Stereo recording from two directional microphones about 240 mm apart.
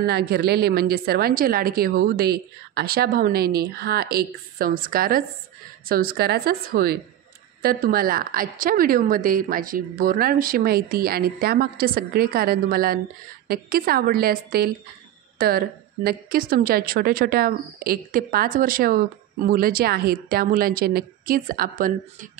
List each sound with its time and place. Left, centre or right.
0.0 s a woman's voice: right